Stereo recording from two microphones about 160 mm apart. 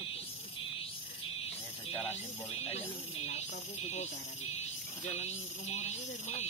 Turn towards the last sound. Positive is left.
turn(degrees=50)  # may be behind; listen again after turning